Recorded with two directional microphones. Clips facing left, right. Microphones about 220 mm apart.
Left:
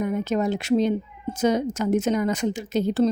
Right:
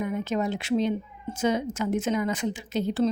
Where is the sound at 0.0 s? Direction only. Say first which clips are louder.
Left 4 dB; 40° left (ahead or behind).